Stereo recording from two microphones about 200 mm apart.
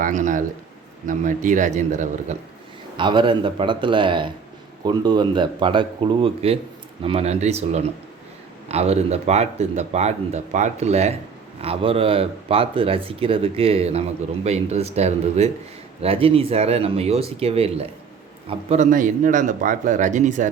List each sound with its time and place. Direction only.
0.0 s a man's voice: 40° right (ahead or behind)
3.0 s speech: 25° right (ahead or behind)